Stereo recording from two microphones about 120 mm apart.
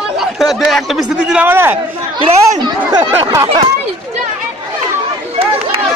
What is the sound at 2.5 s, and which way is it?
Speech, 35° right (ahead or behind).